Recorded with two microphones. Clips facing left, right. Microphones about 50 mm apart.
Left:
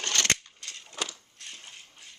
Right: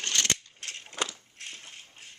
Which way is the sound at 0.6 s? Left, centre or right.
Right.